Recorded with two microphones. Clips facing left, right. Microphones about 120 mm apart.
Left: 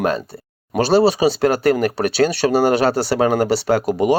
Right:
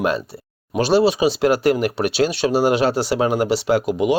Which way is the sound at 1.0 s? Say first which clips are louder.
Left 2 dB; 35° left (ahead or behind).